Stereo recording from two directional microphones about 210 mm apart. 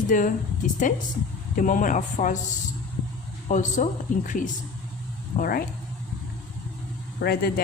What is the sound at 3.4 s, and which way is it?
Speech, 35° left (ahead or behind).